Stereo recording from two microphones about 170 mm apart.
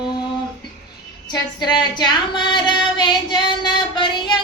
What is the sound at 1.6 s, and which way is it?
Female singing, 25° left (ahead or behind).